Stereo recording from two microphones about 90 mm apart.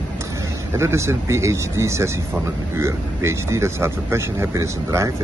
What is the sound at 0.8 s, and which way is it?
Speech, 30° right (ahead or behind).